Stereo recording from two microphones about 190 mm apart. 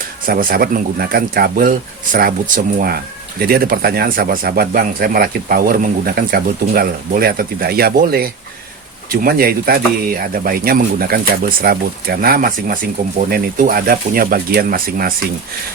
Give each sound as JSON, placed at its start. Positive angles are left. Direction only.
{"t": 0.3, "sound": "speech", "side_deg": -50}